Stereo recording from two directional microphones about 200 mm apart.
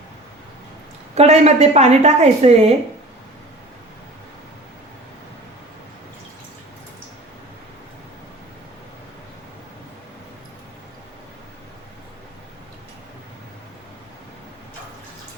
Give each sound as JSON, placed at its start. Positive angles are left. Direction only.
{"t": 1.1, "sound": "a woman's voice", "side_deg": -30}